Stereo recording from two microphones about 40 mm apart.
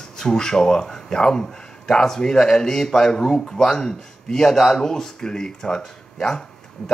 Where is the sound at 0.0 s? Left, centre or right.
Centre.